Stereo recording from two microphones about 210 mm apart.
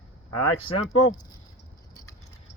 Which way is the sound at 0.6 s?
25° left (ahead or behind).